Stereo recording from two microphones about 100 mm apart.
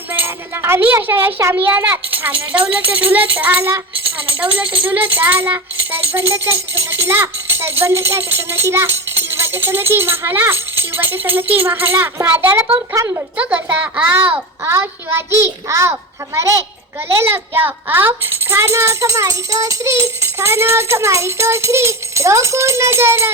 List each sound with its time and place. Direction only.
0.1 s a child's voice: 25° right (ahead or behind)
12.9 s a woman's voice: 30° right (ahead or behind)
13.3 s a child's voice: 15° right (ahead or behind)